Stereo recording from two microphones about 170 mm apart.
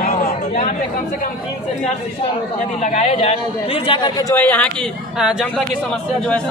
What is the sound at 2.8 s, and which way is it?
A man's voice, 40° left (ahead or behind).